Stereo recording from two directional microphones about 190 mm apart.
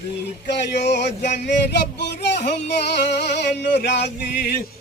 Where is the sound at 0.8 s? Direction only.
65° left (ahead or behind).